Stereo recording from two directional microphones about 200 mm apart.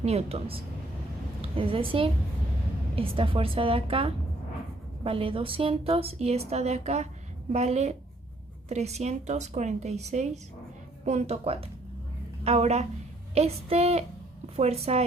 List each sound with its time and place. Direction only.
0.0 s a woman's voice: 30° right (ahead or behind)